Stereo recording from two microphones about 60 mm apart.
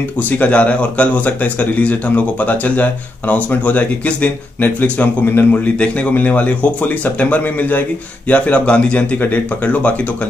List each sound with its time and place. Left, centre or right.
0.4 s speech: left